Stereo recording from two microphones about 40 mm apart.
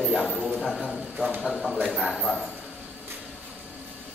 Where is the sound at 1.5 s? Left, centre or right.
Centre.